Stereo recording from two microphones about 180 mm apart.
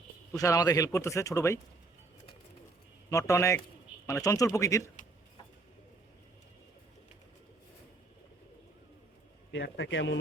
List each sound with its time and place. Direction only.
0.3 s a man's voice: 20° left (ahead or behind)
3.1 s speech: 15° left (ahead or behind)
9.5 s a man's voice: 80° left